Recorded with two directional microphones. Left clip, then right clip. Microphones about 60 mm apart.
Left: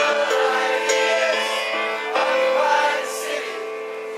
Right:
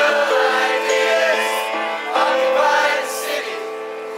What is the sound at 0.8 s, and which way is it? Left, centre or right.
Music, left.